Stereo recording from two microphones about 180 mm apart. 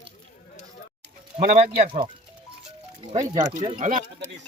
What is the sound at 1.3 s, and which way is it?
Speech, 40° right (ahead or behind).